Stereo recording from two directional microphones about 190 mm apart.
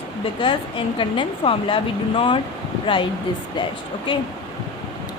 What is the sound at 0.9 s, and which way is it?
Speech, 25° left (ahead or behind).